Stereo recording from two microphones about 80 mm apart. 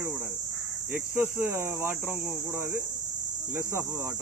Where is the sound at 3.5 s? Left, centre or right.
Right.